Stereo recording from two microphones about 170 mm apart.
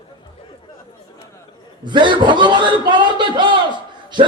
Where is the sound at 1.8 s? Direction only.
25° right (ahead or behind).